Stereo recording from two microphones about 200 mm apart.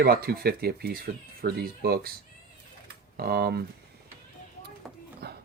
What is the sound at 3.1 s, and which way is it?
Speech, 50° right (ahead or behind).